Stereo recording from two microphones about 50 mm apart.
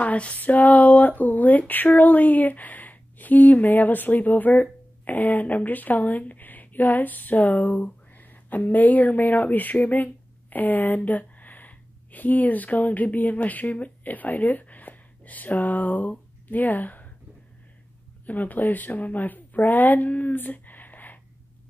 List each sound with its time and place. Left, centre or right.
0.0 s speech: left
18.2 s speech: left